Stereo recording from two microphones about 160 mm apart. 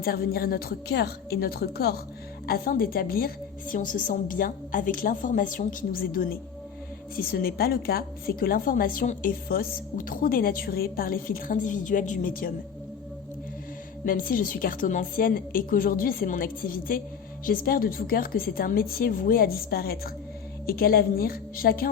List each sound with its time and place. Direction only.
0.0 s a woman's voice: 70° left (ahead or behind)
2.5 s a woman's voice: 65° left (ahead or behind)
14.0 s a woman's voice: 60° left (ahead or behind)